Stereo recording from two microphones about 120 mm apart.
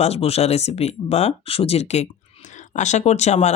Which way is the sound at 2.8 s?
75° left (ahead or behind).